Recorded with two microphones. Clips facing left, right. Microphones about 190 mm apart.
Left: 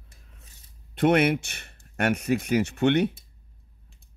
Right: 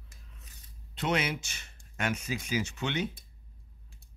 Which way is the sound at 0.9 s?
55° left (ahead or behind).